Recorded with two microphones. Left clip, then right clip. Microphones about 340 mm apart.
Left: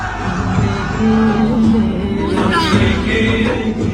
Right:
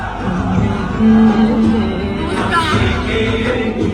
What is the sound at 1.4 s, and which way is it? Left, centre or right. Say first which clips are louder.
Music: right 1 dB; right.